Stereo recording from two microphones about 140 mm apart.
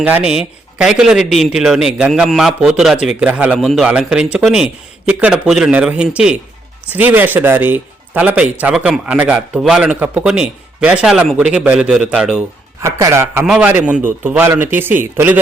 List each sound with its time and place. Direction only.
0.0 s a man's voice: 10° right (ahead or behind)
12.8 s speech: 20° right (ahead or behind)
13.4 s speech: 10° right (ahead or behind)